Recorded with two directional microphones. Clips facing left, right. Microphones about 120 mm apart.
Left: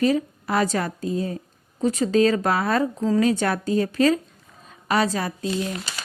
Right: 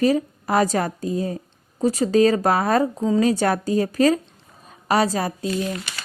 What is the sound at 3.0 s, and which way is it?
Speech, 20° right (ahead or behind).